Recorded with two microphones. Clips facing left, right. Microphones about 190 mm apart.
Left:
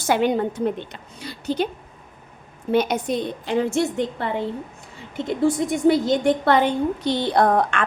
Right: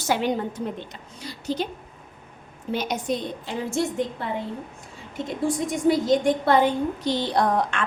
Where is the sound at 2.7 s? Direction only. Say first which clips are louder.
Left 6 dB; 60° left (ahead or behind).